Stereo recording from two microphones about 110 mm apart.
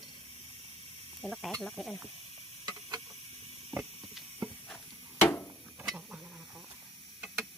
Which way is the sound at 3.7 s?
Centre (ahead or behind).